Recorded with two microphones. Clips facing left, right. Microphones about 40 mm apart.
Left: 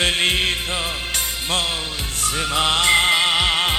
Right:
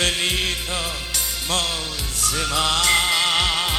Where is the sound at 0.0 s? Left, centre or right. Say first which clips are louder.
Left 3 dB; left.